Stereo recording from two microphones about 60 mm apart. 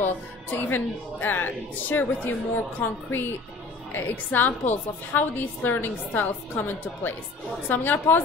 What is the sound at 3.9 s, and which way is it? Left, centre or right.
A woman's voice, left.